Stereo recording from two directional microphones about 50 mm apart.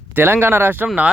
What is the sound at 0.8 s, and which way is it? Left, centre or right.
Speech, right.